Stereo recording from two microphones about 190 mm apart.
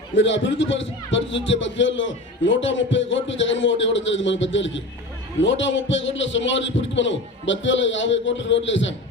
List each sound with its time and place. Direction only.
0.2 s a man's voice: 75° left (ahead or behind)